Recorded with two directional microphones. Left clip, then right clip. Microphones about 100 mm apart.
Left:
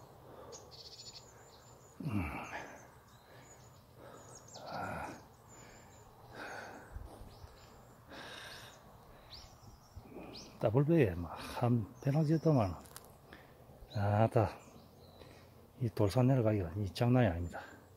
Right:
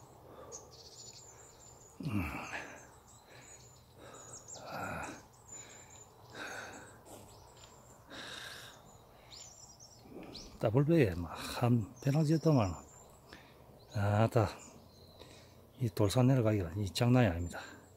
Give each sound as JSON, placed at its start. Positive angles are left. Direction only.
{"t": 2.0, "sound": "a sound", "side_deg": -30}
{"t": 4.0, "sound": "bird", "side_deg": -30}
{"t": 4.8, "sound": "a sound", "side_deg": -25}
{"t": 6.3, "sound": "sniff", "side_deg": -25}
{"t": 8.1, "sound": "snort", "side_deg": -35}
{"t": 10.4, "sound": "speech", "side_deg": -40}
{"t": 13.9, "sound": "speech", "side_deg": -40}
{"t": 15.8, "sound": "speech", "side_deg": -35}